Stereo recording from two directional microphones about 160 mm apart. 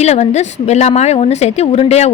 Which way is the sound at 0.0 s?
45° left (ahead or behind).